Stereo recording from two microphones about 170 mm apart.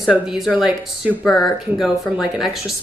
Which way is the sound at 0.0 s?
5° right (ahead or behind).